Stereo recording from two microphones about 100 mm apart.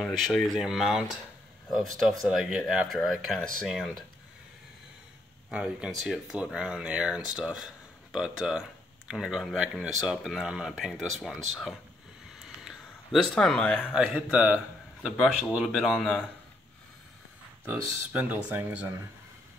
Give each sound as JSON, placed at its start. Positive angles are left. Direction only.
{"t": 0.0, "sound": "speech", "side_deg": 0}
{"t": 5.5, "sound": "speech", "side_deg": -5}
{"t": 12.4, "sound": "a sound", "side_deg": 0}
{"t": 13.9, "sound": "speech", "side_deg": -10}
{"t": 16.0, "sound": "a man's voice", "side_deg": 10}
{"t": 17.6, "sound": "speech", "side_deg": -15}